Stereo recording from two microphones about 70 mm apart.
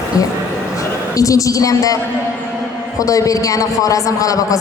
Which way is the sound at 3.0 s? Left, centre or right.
Left.